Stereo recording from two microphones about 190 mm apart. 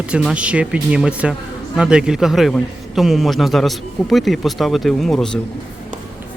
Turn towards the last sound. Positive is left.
turn(degrees=0)  # may be behind; listen again after turning